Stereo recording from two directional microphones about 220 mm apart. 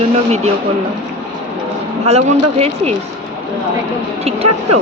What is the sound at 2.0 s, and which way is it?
Speech, 30° right (ahead or behind).